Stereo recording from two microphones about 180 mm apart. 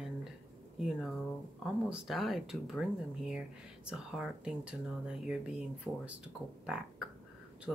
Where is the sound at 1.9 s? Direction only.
5° right (ahead or behind).